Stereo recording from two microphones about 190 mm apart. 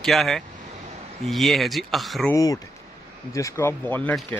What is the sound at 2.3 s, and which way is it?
A man's voice, 20° left (ahead or behind).